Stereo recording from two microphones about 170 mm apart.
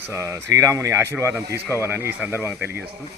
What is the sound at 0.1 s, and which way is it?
Speech, 15° right (ahead or behind).